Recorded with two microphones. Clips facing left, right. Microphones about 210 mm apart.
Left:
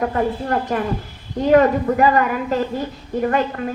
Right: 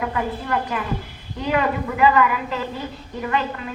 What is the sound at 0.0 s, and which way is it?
A woman's voice, 40° left (ahead or behind).